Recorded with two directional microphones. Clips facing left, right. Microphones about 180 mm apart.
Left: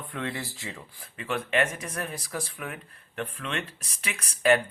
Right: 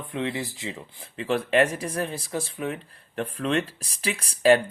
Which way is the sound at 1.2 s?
35° right (ahead or behind).